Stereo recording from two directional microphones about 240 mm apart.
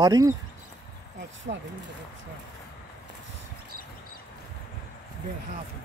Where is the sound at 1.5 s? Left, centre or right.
Right.